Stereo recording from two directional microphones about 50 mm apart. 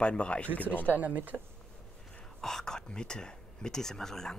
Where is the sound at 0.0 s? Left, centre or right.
Left.